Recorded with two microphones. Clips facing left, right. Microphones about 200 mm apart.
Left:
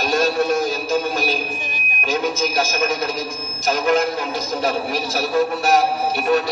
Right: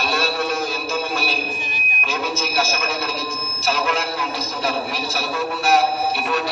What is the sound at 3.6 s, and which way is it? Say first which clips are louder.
A man's voice: left 5 dB; 40° left (ahead or behind).